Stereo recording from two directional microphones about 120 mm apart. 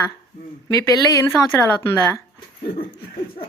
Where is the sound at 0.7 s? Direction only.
30° left (ahead or behind).